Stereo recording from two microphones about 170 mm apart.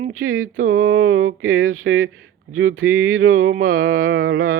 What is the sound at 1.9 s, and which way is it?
Speech, 90° right.